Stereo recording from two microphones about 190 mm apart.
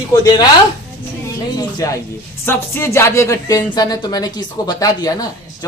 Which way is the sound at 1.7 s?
15° left (ahead or behind).